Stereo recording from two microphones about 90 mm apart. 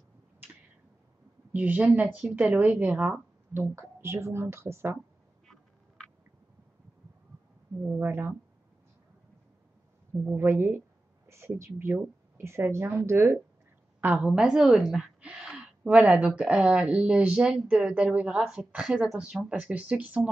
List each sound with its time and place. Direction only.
1.5 s speech: 20° right (ahead or behind)
3.6 s a woman's voice: 30° right (ahead or behind)
7.8 s a woman's voice: 15° right (ahead or behind)
10.2 s a woman's voice: 25° right (ahead or behind)
14.0 s speech: 15° right (ahead or behind)